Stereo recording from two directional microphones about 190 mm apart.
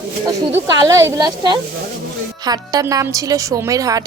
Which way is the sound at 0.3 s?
20° right (ahead or behind).